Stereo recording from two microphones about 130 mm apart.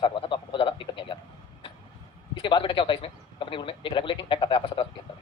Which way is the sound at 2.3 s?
40° left (ahead or behind).